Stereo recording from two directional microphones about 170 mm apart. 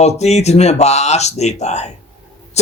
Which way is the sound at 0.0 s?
40° left (ahead or behind).